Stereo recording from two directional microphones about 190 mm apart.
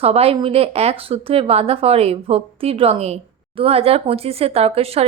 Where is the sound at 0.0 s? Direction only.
30° right (ahead or behind).